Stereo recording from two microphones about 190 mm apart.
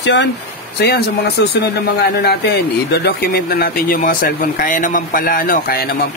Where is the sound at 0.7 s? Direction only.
60° left (ahead or behind).